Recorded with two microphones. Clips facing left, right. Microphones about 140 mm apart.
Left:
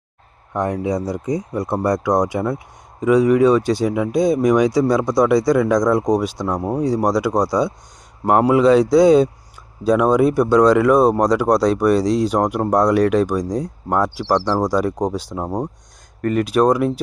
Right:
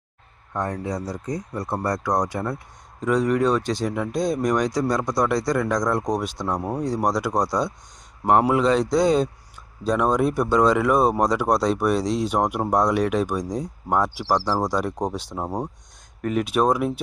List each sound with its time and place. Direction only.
0.5 s speech: 15° left (ahead or behind)
6.6 s speech: 20° left (ahead or behind)
6.8 s speech: centre (ahead or behind)